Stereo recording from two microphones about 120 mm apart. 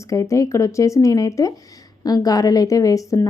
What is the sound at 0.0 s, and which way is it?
Speech, 25° left (ahead or behind).